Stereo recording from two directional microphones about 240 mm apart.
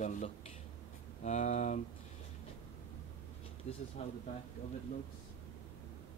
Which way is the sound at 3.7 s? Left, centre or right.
Left.